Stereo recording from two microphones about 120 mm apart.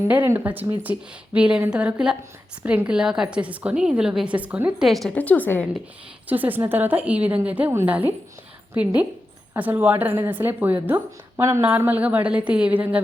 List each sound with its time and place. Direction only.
0.3 s a woman's voice: 15° right (ahead or behind)
4.9 s a woman's voice: centre (ahead or behind)
5.1 s a woman's voice: 10° left (ahead or behind)
6.2 s a woman's voice: 15° right (ahead or behind)